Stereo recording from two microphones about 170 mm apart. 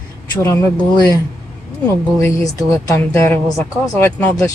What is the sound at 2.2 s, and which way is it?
Speech, 15° left (ahead or behind).